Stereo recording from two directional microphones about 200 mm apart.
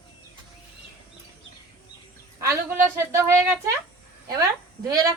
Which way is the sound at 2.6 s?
10° right (ahead or behind).